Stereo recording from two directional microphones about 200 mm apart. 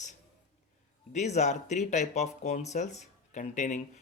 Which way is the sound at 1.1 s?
35° left (ahead or behind).